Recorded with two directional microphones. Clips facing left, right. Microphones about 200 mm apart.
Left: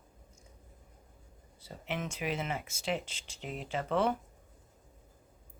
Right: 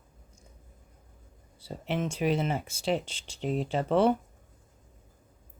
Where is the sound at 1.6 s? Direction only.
30° right (ahead or behind).